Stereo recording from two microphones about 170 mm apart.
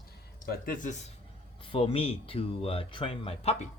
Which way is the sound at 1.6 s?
30° left (ahead or behind).